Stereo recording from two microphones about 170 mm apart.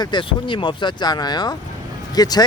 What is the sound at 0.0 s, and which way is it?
Speech, 25° left (ahead or behind).